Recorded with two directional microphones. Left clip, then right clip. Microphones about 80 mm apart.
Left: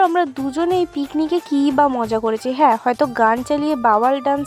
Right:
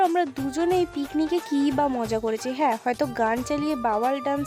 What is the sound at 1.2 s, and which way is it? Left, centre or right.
Speech, left.